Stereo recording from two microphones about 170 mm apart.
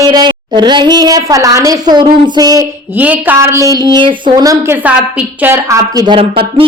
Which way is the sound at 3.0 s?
10° right (ahead or behind).